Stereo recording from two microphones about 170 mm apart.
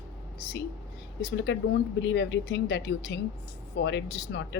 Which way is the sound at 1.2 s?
80° left.